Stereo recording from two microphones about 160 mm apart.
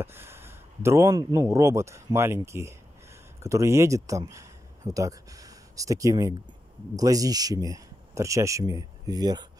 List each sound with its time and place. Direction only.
0.0 s a man's voice: 15° right (ahead or behind)